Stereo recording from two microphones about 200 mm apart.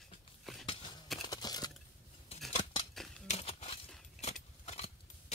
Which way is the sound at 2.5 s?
25° left (ahead or behind).